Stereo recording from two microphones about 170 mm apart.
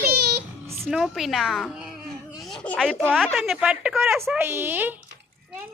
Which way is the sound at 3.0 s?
Centre (ahead or behind).